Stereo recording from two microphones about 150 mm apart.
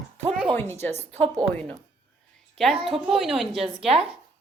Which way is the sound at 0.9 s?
45° right (ahead or behind).